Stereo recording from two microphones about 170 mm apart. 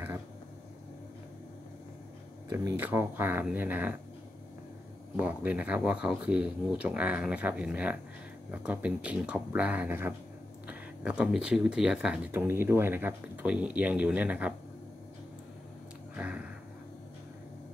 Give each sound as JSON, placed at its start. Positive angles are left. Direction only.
{"t": 2.5, "sound": "speech", "side_deg": -15}
{"t": 5.1, "sound": "speech", "side_deg": -10}
{"t": 16.2, "sound": "a sound", "side_deg": -10}